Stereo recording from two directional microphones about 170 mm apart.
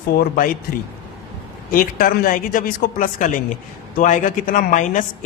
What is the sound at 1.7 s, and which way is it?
A woman's voice, 60° left (ahead or behind).